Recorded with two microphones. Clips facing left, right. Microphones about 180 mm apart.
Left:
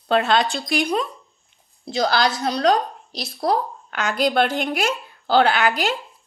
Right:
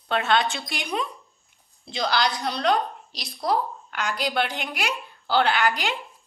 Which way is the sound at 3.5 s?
50° left (ahead or behind).